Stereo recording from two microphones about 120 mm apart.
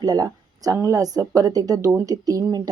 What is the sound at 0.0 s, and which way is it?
A woman's voice, 30° right (ahead or behind).